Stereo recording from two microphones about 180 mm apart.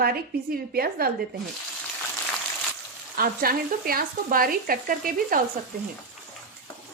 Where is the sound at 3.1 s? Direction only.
55° right (ahead or behind).